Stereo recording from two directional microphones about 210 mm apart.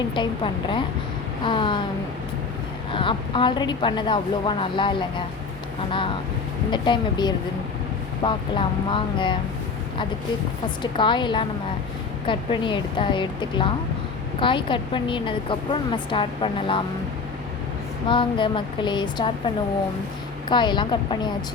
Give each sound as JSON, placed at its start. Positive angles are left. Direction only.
{"t": 0.1, "sound": "a woman's voice", "side_deg": 25}
{"t": 2.9, "sound": "a woman's voice", "side_deg": 25}
{"t": 6.7, "sound": "a woman's voice", "side_deg": 20}
{"t": 10.9, "sound": "a woman's voice", "side_deg": 20}
{"t": 18.1, "sound": "a woman's voice", "side_deg": 25}
{"t": 20.5, "sound": "a woman's voice", "side_deg": 20}